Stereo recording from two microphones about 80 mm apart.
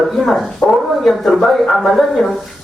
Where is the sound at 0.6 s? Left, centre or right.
Centre.